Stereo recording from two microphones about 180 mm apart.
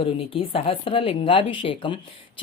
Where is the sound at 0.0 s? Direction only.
30° left (ahead or behind).